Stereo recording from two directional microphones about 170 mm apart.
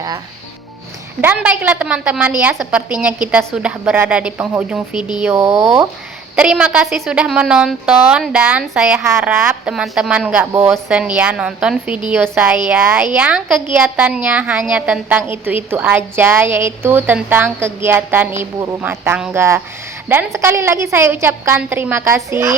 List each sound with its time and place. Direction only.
1.2 s a woman's voice: 10° right (ahead or behind)
4.9 s speech: 25° left (ahead or behind)
5.2 s a woman's voice: 15° right (ahead or behind)
6.3 s a woman's voice: 5° right (ahead or behind)